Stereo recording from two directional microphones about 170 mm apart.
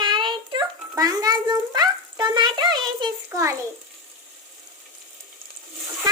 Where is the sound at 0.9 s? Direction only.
20° right (ahead or behind).